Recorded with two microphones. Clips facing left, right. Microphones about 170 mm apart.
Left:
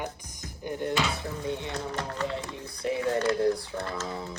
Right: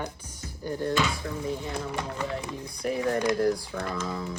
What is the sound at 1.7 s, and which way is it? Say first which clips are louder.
Speech: right 1 dB; 10° right (ahead or behind).